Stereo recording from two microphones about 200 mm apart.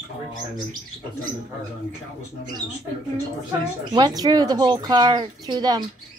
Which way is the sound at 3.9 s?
20° right (ahead or behind).